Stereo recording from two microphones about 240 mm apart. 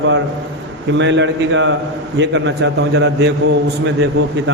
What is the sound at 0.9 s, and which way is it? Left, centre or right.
A man's voice, right.